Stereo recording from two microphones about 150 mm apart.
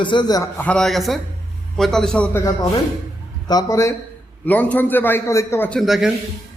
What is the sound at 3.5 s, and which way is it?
Speech, 25° left (ahead or behind).